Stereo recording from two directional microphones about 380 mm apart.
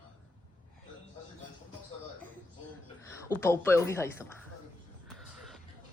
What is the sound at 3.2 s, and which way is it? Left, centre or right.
Speech, centre.